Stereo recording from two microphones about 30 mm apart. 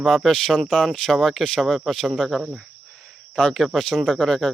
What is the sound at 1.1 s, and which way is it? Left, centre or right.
Speech, centre.